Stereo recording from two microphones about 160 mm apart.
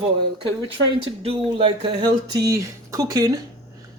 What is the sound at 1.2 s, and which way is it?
Speech, 35° right (ahead or behind).